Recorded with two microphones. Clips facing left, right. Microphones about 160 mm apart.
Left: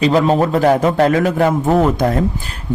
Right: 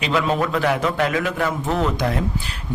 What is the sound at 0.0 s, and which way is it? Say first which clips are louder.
A man's voice: left 7 dB; 40° left (ahead or behind).